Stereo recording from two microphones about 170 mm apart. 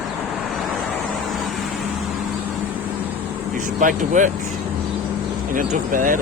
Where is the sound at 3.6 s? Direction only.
50° right (ahead or behind).